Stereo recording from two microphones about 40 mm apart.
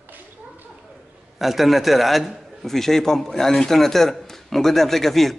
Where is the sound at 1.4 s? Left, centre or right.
Centre.